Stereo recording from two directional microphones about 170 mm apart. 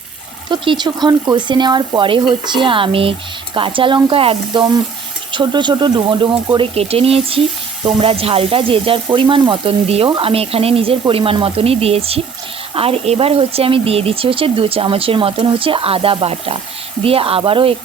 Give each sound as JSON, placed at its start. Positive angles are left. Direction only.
{"t": 0.4, "sound": "speech", "side_deg": -30}